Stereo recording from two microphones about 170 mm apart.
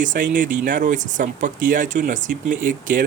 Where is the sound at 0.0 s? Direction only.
50° right (ahead or behind).